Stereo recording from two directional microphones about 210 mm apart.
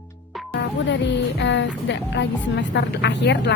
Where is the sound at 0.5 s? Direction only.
55° left (ahead or behind).